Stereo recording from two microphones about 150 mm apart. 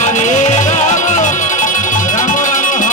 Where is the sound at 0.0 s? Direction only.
55° left (ahead or behind).